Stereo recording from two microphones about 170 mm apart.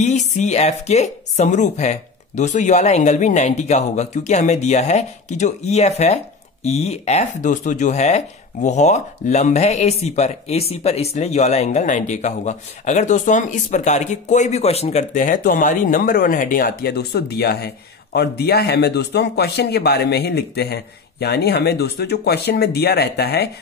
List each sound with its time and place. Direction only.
0.0 s speech: 45° left (ahead or behind); by 23.5 s 70° left (ahead or behind)